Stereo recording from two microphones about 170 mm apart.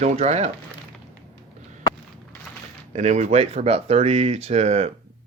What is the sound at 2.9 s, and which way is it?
Speech, 45° right (ahead or behind).